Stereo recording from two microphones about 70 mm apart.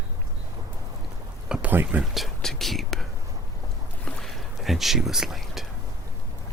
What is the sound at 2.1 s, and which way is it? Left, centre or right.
Speech, centre.